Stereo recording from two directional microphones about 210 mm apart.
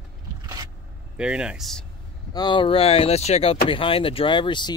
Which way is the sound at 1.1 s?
5° right (ahead or behind).